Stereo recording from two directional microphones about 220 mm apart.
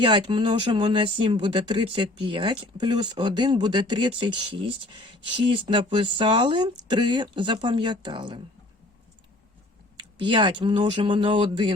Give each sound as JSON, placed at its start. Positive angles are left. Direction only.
{"t": 0.0, "sound": "speech", "side_deg": -20}
{"t": 10.0, "sound": "speech", "side_deg": -20}